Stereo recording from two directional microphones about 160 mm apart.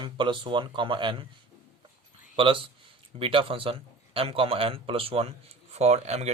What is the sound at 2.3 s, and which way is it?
A man's voice, 35° right (ahead or behind).